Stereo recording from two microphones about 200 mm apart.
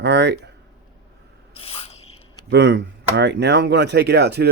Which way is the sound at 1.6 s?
30° left (ahead or behind).